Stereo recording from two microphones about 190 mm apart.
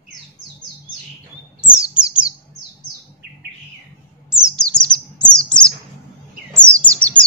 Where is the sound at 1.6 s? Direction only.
5° right (ahead or behind).